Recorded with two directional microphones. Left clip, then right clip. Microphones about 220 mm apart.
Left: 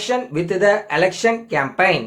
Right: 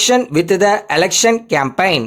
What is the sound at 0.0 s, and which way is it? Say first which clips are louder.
Speech: right 8 dB; 50° right (ahead or behind).